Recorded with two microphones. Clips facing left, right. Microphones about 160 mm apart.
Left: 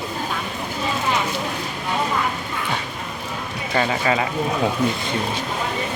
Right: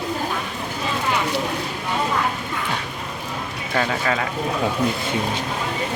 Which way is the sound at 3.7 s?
5° left (ahead or behind).